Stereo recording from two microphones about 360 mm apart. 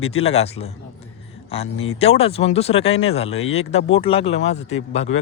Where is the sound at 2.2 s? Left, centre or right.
Centre.